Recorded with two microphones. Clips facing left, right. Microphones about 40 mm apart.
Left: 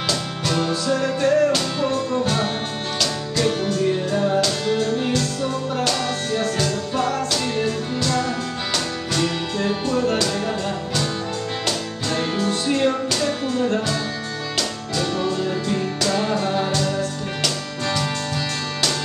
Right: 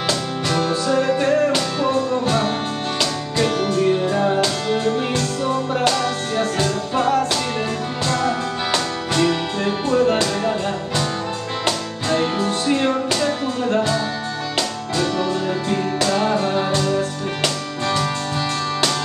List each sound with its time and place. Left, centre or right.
0.5 s music: centre
3.0 s music: centre
12.1 s music: centre
16.1 s music: centre